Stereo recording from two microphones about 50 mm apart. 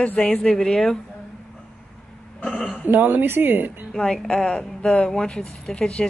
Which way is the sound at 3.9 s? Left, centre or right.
Centre.